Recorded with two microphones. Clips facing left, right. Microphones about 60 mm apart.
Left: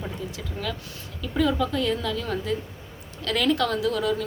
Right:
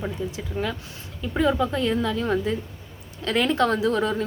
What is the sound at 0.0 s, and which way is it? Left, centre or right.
A woman's voice, right.